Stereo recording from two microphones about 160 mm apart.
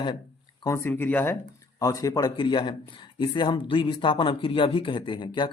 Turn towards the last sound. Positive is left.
turn(degrees=30)  # may be behind; listen again after turning